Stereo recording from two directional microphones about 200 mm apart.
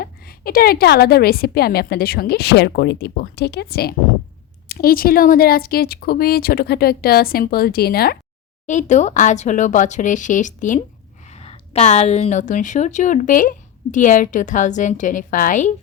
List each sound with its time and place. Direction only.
0.0 s a woman's voice: 50° left (ahead or behind)
8.6 s a woman's voice: 35° left (ahead or behind)